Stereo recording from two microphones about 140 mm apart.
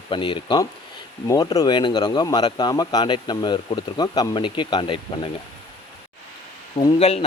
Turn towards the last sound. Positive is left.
turn(degrees=45)  # may be behind; listen again after turning